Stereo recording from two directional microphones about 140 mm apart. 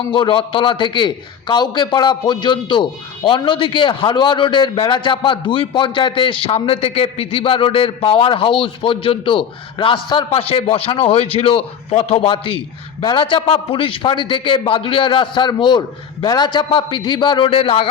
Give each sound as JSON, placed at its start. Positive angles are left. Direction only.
{"t": 0.1, "sound": "a man's voice", "side_deg": 35}